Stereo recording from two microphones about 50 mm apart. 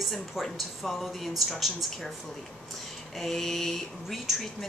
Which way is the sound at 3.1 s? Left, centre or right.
Centre.